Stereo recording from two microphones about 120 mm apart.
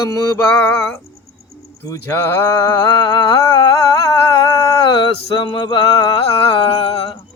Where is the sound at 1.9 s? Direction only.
25° left (ahead or behind); by 7.2 s 45° left (ahead or behind).